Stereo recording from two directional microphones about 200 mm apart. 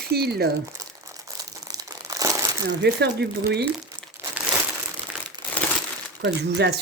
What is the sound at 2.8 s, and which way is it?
Speech, 55° right (ahead or behind).